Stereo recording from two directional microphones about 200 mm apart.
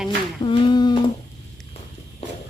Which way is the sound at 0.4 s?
25° left (ahead or behind).